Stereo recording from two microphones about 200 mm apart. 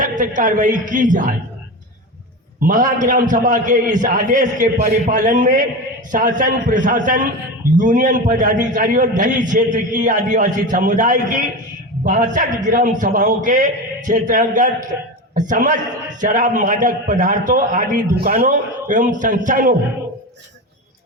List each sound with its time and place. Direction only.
0.0 s a man's voice: 40° right (ahead or behind)
2.6 s a man's voice: 40° right (ahead or behind)